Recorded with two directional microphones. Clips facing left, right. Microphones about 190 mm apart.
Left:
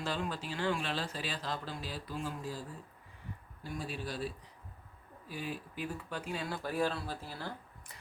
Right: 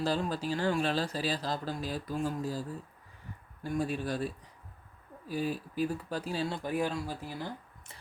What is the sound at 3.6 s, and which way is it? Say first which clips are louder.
Speech: right 8 dB; 50° right (ahead or behind).